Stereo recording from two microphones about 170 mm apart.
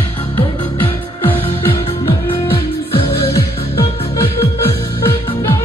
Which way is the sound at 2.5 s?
35° left (ahead or behind).